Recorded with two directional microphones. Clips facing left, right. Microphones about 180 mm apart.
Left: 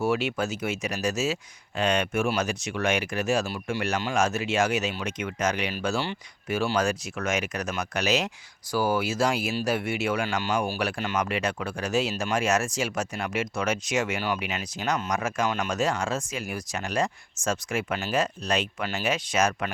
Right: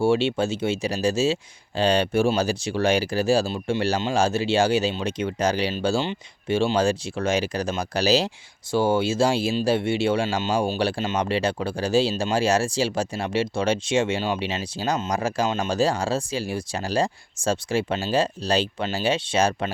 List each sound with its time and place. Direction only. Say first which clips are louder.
0.0 s speech: right 5 dB; 30° right (ahead or behind)